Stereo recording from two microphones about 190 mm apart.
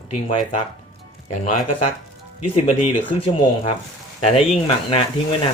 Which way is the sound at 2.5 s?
35° left (ahead or behind).